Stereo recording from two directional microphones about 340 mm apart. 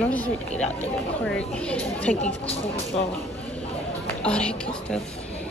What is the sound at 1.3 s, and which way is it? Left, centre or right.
Speech, centre.